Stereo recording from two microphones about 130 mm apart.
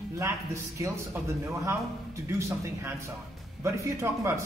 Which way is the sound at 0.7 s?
25° right (ahead or behind).